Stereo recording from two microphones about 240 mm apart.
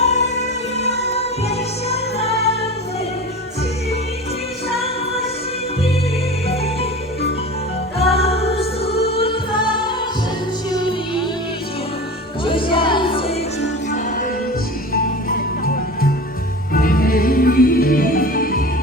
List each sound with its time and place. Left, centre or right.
0.0 s music: left
4.7 s music: left
8.1 s music: left
12.5 s music: left
13.6 s music: left